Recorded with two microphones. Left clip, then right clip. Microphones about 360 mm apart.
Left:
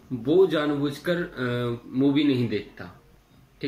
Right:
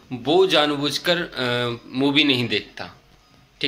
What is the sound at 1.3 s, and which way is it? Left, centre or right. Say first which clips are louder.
Speech: right 5 dB; right.